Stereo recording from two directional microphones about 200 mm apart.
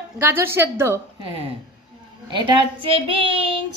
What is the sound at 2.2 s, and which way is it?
A child's voice, 25° right (ahead or behind).